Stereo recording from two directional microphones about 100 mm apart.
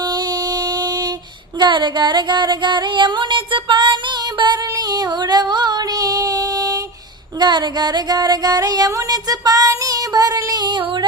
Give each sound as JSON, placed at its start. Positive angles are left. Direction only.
{"t": 0.1, "sound": "a sound", "side_deg": -45}
{"t": 1.5, "sound": "music", "side_deg": -50}
{"t": 4.4, "sound": "female singing", "side_deg": -45}
{"t": 7.3, "sound": "music", "side_deg": -45}